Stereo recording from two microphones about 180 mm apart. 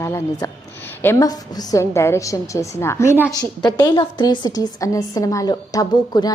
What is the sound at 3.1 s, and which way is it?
Speech, 10° right (ahead or behind).